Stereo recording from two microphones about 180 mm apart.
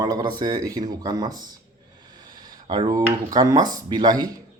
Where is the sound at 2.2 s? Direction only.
25° right (ahead or behind).